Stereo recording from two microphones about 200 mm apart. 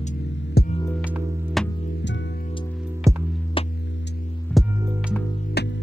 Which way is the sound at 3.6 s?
25° left (ahead or behind).